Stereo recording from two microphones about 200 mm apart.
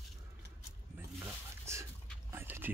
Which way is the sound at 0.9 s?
10° right (ahead or behind).